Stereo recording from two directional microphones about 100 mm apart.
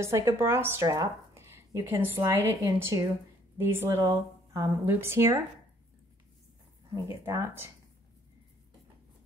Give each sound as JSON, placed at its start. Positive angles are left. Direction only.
{"t": 0.0, "sound": "a woman's voice", "side_deg": -25}
{"t": 4.0, "sound": "speech", "side_deg": -35}
{"t": 4.8, "sound": "speech", "side_deg": -25}
{"t": 7.1, "sound": "speech", "side_deg": -30}